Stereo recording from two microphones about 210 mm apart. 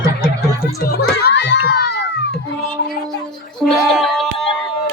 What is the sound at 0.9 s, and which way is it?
Crowd, 50° left (ahead or behind).